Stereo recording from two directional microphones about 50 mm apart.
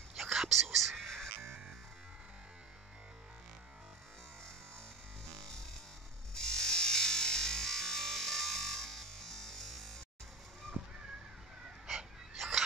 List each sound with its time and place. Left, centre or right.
0.2 s whispering: centre
1.0 s music: centre
6.3 s music: centre
10.8 s a sound: centre